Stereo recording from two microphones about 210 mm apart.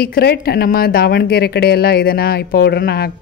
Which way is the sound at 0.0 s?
50° left (ahead or behind).